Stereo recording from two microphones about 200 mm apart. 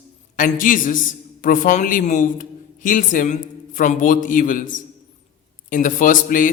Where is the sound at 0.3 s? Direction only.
40° left (ahead or behind).